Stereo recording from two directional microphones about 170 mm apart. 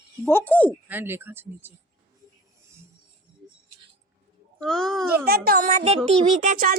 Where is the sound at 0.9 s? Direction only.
10° right (ahead or behind).